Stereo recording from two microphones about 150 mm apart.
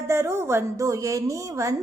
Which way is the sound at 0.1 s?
20° right (ahead or behind).